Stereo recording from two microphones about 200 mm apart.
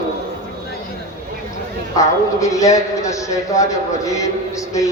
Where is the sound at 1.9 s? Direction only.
15° left (ahead or behind).